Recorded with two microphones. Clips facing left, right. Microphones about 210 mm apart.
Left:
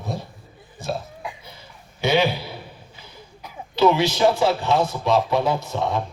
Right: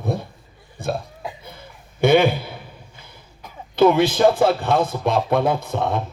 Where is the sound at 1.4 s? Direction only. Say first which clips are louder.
Right 4 dB; 55° right (ahead or behind).